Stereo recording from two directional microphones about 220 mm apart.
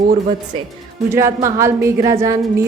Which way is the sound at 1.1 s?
15° right (ahead or behind).